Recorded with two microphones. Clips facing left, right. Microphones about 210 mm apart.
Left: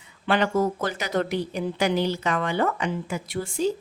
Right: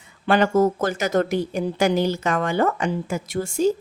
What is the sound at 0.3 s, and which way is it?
A woman's voice, 45° right (ahead or behind).